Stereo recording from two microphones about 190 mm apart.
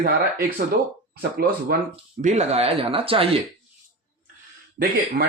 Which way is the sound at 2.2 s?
40° right (ahead or behind).